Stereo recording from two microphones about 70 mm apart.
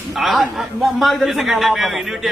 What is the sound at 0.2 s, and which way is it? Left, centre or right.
A man's voice, centre.